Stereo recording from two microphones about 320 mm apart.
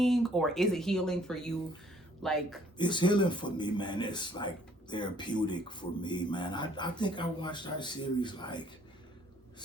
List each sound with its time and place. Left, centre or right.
0.0 s speech: centre
2.7 s speech: centre